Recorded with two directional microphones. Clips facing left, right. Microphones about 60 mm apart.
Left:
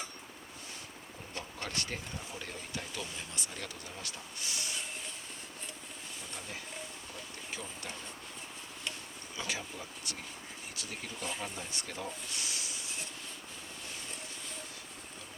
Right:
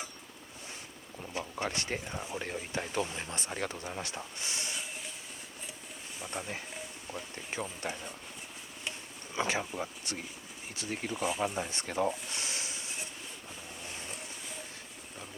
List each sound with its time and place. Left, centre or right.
1.3 s speech: centre
6.3 s speech: right
9.3 s speech: right
11.2 s speech: centre
11.5 s speech: right